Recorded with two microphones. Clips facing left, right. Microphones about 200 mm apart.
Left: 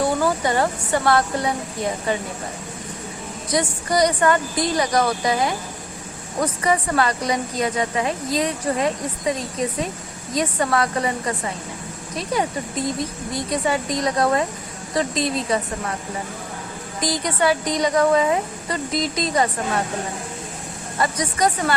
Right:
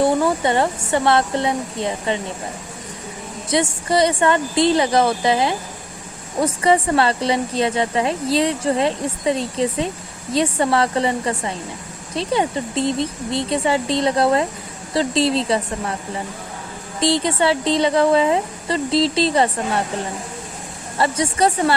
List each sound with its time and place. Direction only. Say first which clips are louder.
1.0 s a woman's voice: right 2 dB; 25° right (ahead or behind)
3.5 s a woman's voice: right 3 dB; 25° right (ahead or behind)
17.0 s a woman's voice: right 4 dB; 25° right (ahead or behind)
21.0 s a woman's voice: right 3 dB; 30° right (ahead or behind)